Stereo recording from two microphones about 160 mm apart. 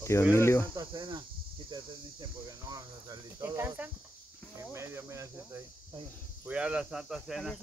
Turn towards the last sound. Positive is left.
turn(degrees=0)  # may be behind; listen again after turning